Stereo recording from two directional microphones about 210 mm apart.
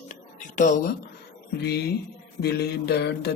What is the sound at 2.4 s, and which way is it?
Mantra, 50° left (ahead or behind).